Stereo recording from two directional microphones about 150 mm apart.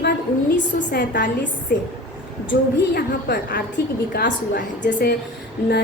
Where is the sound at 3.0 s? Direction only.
90° left.